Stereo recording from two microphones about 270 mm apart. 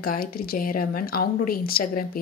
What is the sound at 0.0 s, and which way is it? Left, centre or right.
Speech, left.